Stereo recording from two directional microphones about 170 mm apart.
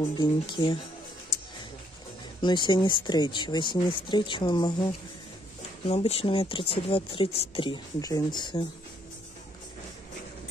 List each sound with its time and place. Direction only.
0.2 s speech: 25° left (ahead or behind)
1.3 s a sound: 75° left (ahead or behind)
2.4 s speech: 25° left (ahead or behind)
5.9 s speech: 35° left (ahead or behind)